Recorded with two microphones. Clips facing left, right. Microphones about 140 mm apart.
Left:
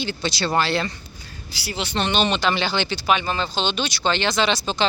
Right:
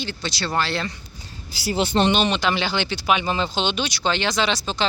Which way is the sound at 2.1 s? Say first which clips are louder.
Right 1 dB; 5° right (ahead or behind).